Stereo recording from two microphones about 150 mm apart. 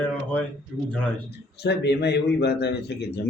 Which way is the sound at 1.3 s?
90° left.